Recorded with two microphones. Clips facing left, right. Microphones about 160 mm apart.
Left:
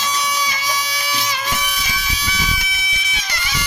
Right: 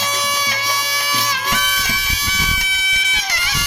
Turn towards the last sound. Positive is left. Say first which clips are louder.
# right 1 dB
turn(degrees=-80)